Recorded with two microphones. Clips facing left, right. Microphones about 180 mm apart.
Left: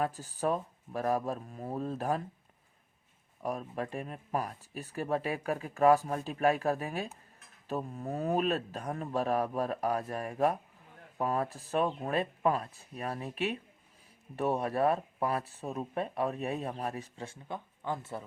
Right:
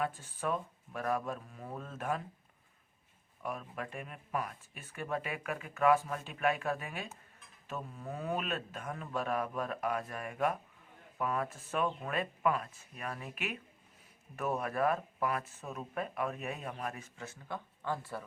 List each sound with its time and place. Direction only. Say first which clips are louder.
0.0 s speech: left 4 dB; 40° left (ahead or behind)
3.4 s speech: left 5 dB; 35° left (ahead or behind)
17.5 s speech: left 1 dB; 20° left (ahead or behind)